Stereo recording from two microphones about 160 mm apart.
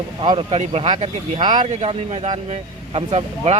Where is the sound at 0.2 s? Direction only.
35° right (ahead or behind).